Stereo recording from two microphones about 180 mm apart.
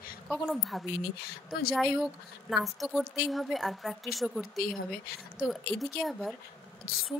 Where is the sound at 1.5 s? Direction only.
55° left (ahead or behind).